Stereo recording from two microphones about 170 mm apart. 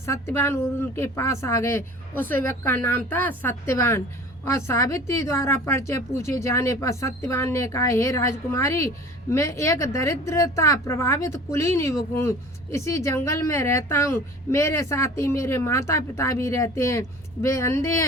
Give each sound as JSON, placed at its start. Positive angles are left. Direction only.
{"t": 0.0, "sound": "a woman's voice", "side_deg": 15}